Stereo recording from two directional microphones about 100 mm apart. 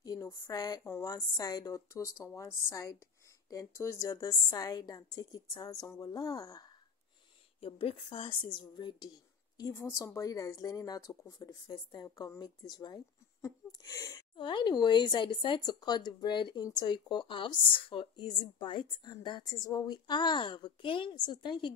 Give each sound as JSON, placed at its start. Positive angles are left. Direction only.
{"t": 0.0, "sound": "speech", "side_deg": 35}
{"t": 7.6, "sound": "a woman's voice", "side_deg": 65}
{"t": 9.6, "sound": "speech", "side_deg": 35}
{"t": 14.3, "sound": "a woman's voice", "side_deg": 55}
{"t": 19.4, "sound": "a woman's voice", "side_deg": 35}